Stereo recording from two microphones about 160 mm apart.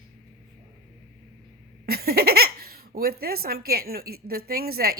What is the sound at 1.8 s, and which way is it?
Speech, 75° right (ahead or behind).